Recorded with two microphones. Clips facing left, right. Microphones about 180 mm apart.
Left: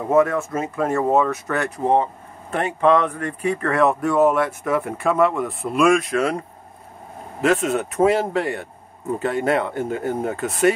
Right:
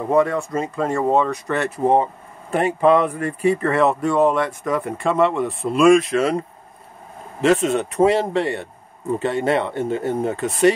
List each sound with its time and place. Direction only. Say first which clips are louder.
0.1 s speech: left 1 dB; 5° left (ahead or behind)
7.4 s speech: right 2 dB; centre (ahead or behind)